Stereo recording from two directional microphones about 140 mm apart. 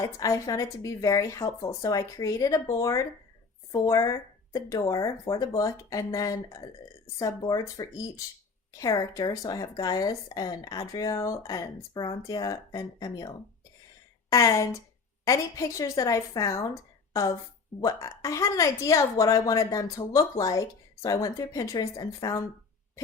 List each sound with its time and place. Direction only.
0.0 s a woman's voice: 25° left (ahead or behind)
17.7 s a woman's voice: 25° left (ahead or behind)